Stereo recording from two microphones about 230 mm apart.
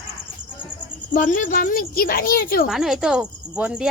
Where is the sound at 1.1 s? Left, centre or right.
Left.